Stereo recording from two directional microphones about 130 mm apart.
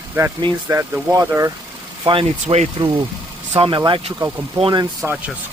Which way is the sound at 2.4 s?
60° right (ahead or behind).